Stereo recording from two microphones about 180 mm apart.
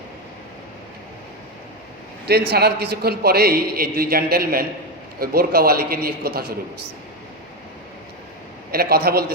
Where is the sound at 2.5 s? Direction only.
65° right (ahead or behind).